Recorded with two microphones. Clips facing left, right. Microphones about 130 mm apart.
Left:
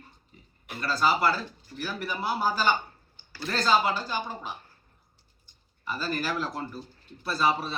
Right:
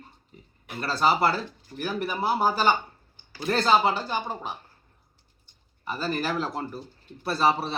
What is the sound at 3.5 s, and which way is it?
Speech, 55° right (ahead or behind).